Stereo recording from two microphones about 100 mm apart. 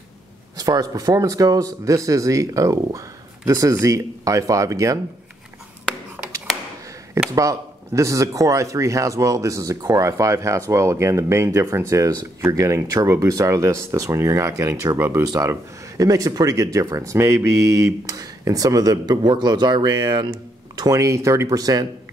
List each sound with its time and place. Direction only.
0.6 s speech: 40° right (ahead or behind)
7.3 s speech: 30° right (ahead or behind)
15.2 s speech: 40° right (ahead or behind)